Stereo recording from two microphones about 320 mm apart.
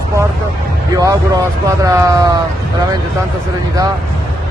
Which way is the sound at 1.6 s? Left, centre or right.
Centre.